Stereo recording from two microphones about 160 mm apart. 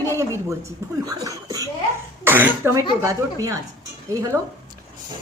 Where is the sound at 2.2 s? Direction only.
15° right (ahead or behind).